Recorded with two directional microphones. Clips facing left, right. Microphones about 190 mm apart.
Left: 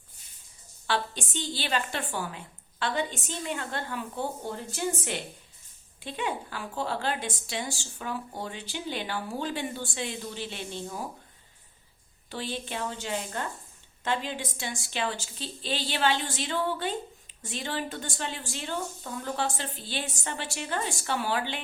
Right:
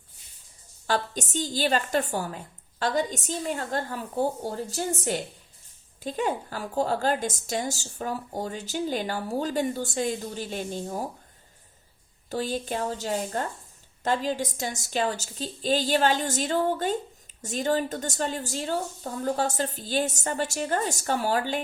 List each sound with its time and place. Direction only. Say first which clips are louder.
0.9 s a woman's voice: right 3 dB; 40° right (ahead or behind)
12.3 s a woman's voice: right 6 dB; 45° right (ahead or behind)